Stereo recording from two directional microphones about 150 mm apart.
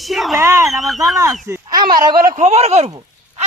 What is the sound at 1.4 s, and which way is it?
Speech, 20° right (ahead or behind).